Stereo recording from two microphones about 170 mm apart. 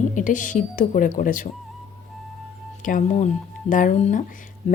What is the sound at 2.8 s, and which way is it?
A woman's voice, 50° left (ahead or behind).